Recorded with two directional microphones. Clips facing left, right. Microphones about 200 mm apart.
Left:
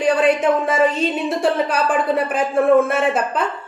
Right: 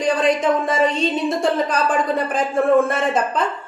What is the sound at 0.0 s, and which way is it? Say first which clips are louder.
A woman's voice: left 2 dB; 5° left (ahead or behind).